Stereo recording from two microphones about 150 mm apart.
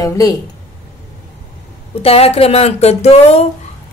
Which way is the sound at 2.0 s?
40° left (ahead or behind).